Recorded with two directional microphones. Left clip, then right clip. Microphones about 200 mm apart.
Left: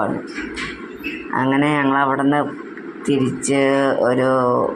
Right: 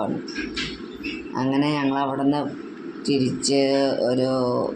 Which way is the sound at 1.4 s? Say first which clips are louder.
Left 5 dB; 10° left (ahead or behind).